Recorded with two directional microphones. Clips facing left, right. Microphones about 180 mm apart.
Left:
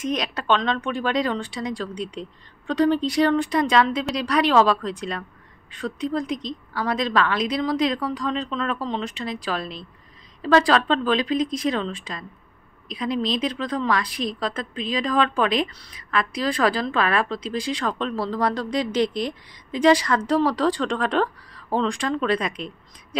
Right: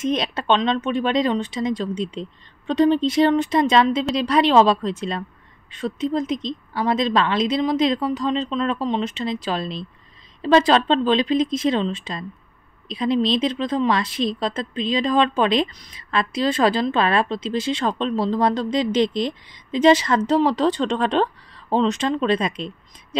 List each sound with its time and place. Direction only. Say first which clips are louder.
0.0 s a woman's voice: right 3 dB; 25° right (ahead or behind)